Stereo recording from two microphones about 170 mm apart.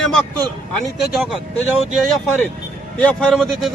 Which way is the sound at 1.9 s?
Centre (ahead or behind).